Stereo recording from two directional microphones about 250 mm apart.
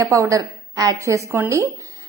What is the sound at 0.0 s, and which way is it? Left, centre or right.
A woman's voice, centre.